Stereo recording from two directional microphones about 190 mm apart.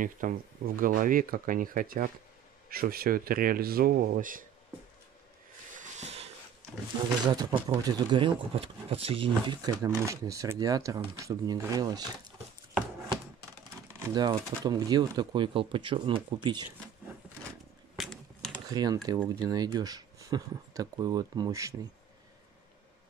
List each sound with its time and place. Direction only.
0.0 s speech: 45° right (ahead or behind)
5.8 s a sound: 35° right (ahead or behind)
7.3 s speech: 20° right (ahead or behind)
13.9 s speech: 20° right (ahead or behind)
17.9 s a sound: centre (ahead or behind)
18.7 s speech: 20° right (ahead or behind)